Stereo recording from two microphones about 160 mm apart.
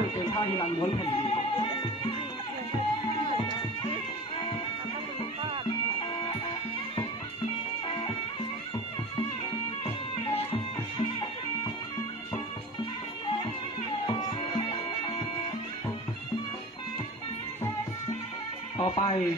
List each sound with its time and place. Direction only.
0.2 s music: 30° left (ahead or behind)
9.8 s music: 35° left (ahead or behind)
18.8 s speech: 35° left (ahead or behind)